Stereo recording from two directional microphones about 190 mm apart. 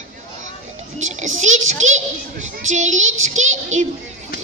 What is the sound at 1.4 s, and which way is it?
A child's voice, 40° right (ahead or behind).